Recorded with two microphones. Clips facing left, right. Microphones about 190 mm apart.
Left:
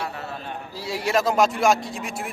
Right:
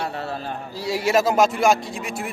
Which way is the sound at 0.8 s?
Centre (ahead or behind).